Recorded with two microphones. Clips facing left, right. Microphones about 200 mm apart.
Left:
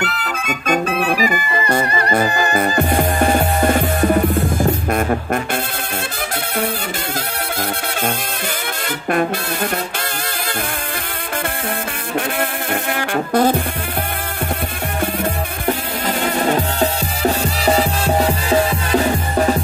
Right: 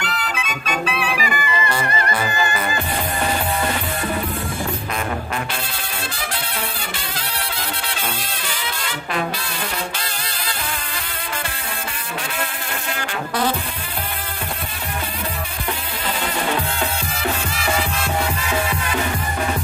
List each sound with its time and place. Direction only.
0.0 s music: 50° left (ahead or behind)
12.9 s music: 50° left (ahead or behind)
16.4 s music: 40° left (ahead or behind)